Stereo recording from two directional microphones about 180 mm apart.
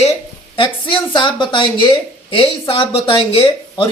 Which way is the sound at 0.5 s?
30° left (ahead or behind).